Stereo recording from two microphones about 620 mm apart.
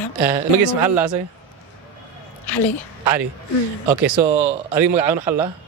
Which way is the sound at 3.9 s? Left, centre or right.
Right.